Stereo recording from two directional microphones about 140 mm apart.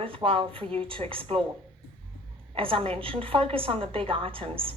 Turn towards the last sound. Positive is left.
turn(degrees=-40)  # may be behind; listen again after turning